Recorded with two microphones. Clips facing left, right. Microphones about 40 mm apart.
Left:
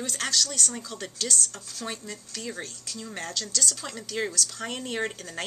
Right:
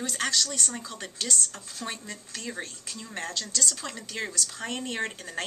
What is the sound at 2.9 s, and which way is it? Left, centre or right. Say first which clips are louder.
Speech: left 1 dB; centre.